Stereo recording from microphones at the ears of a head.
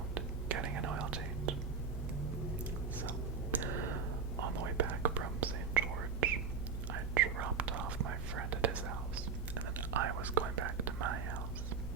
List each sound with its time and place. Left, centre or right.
0.1 s whispering: right
3.0 s whispering: right